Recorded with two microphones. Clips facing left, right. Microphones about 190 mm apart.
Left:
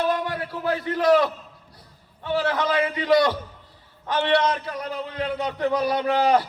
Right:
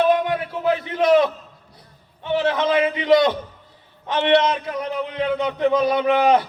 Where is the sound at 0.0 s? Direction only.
20° right (ahead or behind).